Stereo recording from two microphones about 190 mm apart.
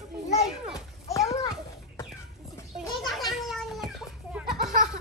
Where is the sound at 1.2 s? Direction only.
35° left (ahead or behind).